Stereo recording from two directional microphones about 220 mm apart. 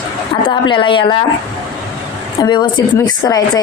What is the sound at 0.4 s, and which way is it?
Speech, 20° left (ahead or behind).